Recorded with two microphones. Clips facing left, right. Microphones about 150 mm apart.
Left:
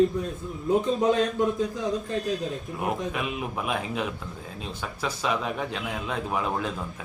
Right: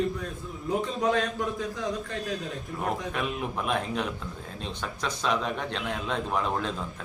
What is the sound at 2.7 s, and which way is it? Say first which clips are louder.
Speech: even; 5° left (ahead or behind).